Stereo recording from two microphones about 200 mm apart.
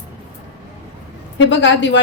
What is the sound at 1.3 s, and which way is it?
Speech, 65° left (ahead or behind).